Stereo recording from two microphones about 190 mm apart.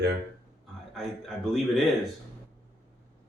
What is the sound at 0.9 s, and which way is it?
Speech, centre (ahead or behind).